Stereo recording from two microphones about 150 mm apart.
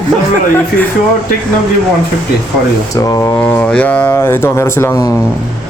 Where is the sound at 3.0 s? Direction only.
25° left (ahead or behind).